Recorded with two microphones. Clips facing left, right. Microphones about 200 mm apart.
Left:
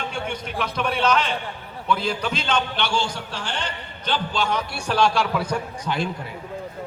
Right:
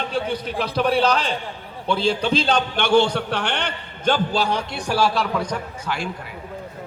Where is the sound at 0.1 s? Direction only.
35° right (ahead or behind).